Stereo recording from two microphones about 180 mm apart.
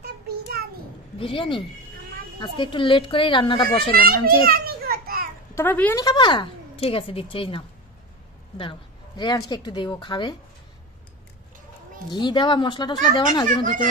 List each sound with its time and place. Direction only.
0.0 s child singing: 60° right (ahead or behind)
1.1 s speech: 30° left (ahead or behind)
3.9 s a child's voice: 55° right (ahead or behind)
4.5 s children playing: 55° right (ahead or behind)
5.5 s a woman's voice: 10° left (ahead or behind)
6.0 s speech: 25° left (ahead or behind)
12.1 s speech: 25° left (ahead or behind)